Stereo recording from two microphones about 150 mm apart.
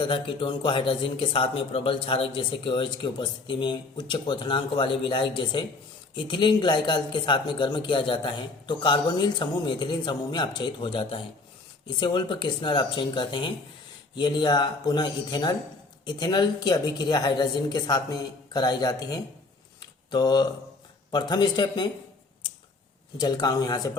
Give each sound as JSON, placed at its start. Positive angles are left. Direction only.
{"t": 0.0, "sound": "speech", "side_deg": 35}
{"t": 19.8, "sound": "a sound", "side_deg": 30}
{"t": 21.1, "sound": "speech", "side_deg": 30}
{"t": 23.1, "sound": "speech", "side_deg": 25}